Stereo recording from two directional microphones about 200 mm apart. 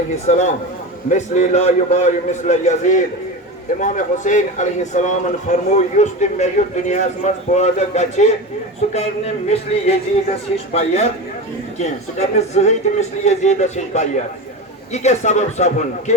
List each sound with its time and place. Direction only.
0.3 s speech: 35° left (ahead or behind)